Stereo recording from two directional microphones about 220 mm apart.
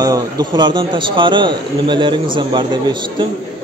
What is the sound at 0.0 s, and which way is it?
Speech, 15° right (ahead or behind).